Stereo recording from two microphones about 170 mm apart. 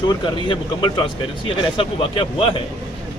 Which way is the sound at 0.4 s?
30° left (ahead or behind).